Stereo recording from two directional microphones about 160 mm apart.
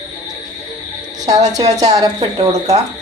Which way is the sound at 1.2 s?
45° right (ahead or behind).